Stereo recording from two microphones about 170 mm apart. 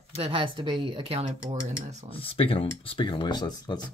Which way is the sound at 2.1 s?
35° left (ahead or behind).